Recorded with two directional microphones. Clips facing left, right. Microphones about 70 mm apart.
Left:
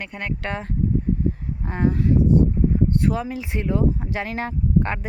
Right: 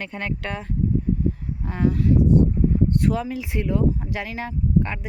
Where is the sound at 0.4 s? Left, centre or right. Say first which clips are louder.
Left 3 dB; left.